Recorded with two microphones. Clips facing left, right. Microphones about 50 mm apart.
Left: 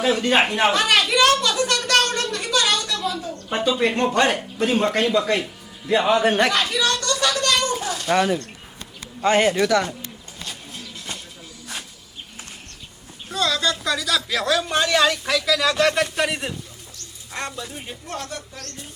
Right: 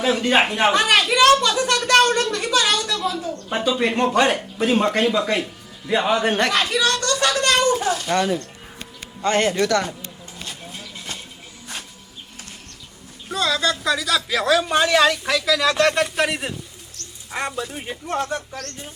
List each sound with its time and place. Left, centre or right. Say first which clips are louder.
0.0 s a man's voice: even; centre
7.0 s a sound: right 2 dB; right
7.4 s children playing: right 3 dB; right
8.0 s speech: left 1 dB; centre
13.3 s a sound: right 1 dB; centre
14.3 s speech: right 6 dB; centre
17.3 s speech: right 4 dB; centre